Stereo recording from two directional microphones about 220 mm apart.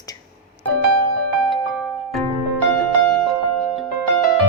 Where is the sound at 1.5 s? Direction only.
Centre (ahead or behind).